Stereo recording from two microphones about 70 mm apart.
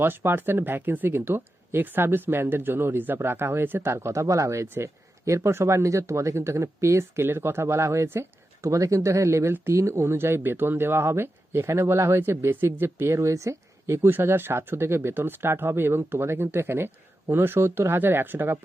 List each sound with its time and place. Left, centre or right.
0.0 s speech: right
8.6 s speech: right